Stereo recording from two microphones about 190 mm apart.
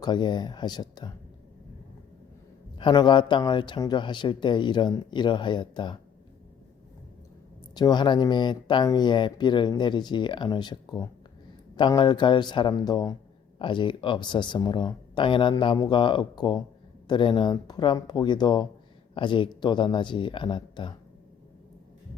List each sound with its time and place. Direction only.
0.0 s speech: 25° left (ahead or behind)
2.7 s speech: 25° left (ahead or behind)
7.8 s speech: 20° left (ahead or behind)